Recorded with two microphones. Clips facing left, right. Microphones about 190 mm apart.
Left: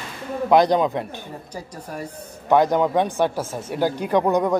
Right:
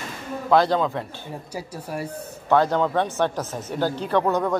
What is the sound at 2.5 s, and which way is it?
Speech, 15° left (ahead or behind).